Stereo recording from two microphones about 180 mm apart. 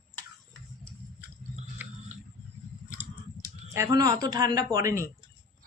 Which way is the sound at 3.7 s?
20° right (ahead or behind).